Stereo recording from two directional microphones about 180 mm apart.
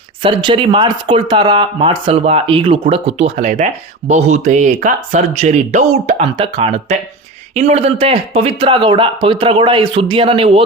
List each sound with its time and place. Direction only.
0.2 s a man's voice: 30° right (ahead or behind)